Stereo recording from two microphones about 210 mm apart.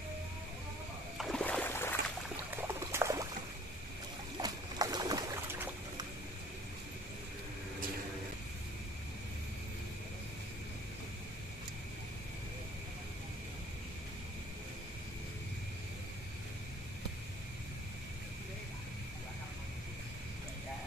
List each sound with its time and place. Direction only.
1.1 s a sound: centre (ahead or behind)
2.5 s pour: 10° right (ahead or behind)
4.4 s boat: 20° right (ahead or behind)